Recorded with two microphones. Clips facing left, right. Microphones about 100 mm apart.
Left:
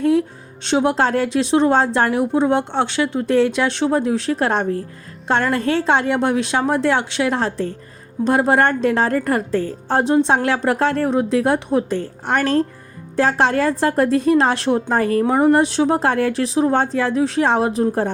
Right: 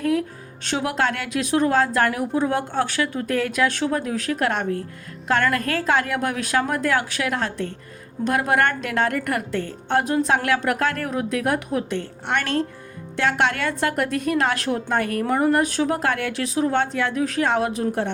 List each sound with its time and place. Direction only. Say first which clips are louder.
0.0 s speech: left 5 dB; 25° left (ahead or behind)